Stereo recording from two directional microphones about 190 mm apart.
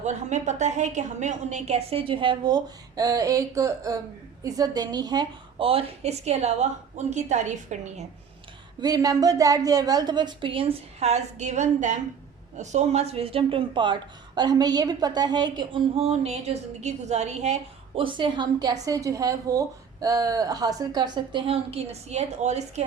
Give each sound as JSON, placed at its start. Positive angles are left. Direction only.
{"t": 0.0, "sound": "a woman's voice", "side_deg": -40}
{"t": 8.8, "sound": "speech", "side_deg": -20}